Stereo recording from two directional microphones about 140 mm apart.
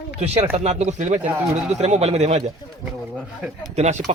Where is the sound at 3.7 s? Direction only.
50° right (ahead or behind).